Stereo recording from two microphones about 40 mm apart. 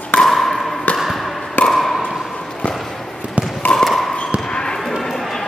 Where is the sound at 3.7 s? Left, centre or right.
Centre.